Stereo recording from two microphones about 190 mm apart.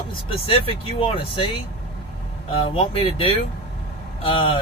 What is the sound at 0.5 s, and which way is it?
Speech, 30° left (ahead or behind).